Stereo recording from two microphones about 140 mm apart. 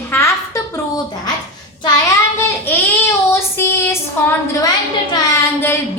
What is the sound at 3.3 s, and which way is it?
Child singing, 15° left (ahead or behind).